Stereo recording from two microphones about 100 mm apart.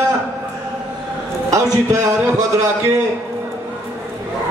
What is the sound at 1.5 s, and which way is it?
A man's voice, 30° right (ahead or behind).